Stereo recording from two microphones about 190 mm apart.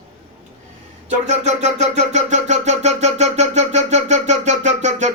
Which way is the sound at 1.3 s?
35° right (ahead or behind).